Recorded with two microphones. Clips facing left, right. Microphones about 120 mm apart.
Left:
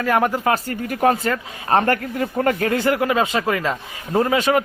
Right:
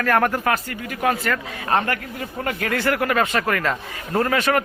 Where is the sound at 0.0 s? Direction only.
15° left (ahead or behind).